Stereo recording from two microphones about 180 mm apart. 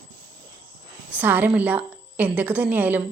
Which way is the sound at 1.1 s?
10° right (ahead or behind).